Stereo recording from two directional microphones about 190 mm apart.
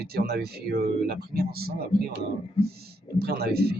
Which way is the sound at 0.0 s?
55° right (ahead or behind).